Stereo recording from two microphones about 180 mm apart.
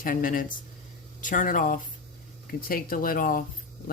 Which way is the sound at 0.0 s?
50° left (ahead or behind).